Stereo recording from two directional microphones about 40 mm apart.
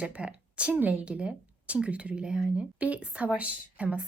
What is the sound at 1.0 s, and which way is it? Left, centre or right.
Speech, right.